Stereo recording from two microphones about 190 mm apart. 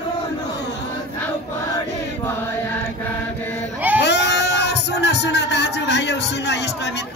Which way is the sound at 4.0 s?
65° left (ahead or behind).